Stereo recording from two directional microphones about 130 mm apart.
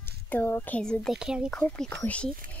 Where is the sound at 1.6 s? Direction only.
10° left (ahead or behind).